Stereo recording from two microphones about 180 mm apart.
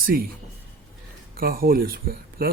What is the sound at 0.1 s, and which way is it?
Speech, 55° right (ahead or behind).